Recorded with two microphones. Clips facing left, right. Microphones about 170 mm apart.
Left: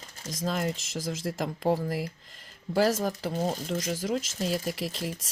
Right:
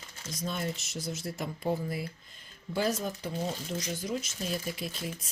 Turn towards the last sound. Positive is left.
turn(degrees=80)